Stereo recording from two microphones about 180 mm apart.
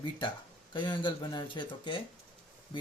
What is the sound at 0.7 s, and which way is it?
Speech, 25° left (ahead or behind).